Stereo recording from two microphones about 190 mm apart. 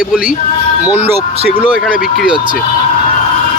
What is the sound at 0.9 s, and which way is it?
Speech, 10° right (ahead or behind).